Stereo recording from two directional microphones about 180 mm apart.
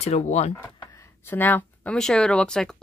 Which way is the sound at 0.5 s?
15° left (ahead or behind).